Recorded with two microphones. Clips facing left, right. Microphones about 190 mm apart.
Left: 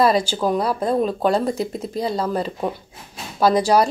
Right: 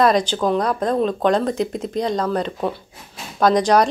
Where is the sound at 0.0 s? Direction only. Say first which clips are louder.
Right 1 dB; 5° left (ahead or behind).